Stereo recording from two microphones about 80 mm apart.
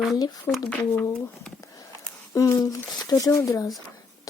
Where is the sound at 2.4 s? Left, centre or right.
Left.